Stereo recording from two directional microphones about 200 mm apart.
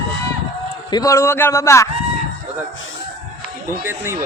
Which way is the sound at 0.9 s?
15° left (ahead or behind).